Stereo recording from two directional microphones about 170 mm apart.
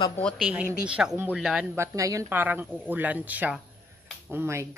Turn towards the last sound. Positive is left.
turn(degrees=-15)  # may be behind; listen again after turning